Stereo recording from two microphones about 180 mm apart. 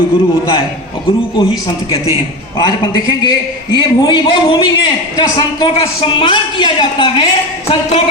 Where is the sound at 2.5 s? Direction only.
25° left (ahead or behind).